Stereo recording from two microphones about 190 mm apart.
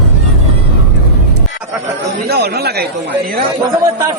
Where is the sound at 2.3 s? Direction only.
55° right (ahead or behind).